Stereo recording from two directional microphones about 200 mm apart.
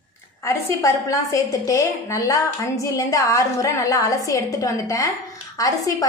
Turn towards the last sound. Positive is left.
turn(degrees=15)  # may be behind; listen again after turning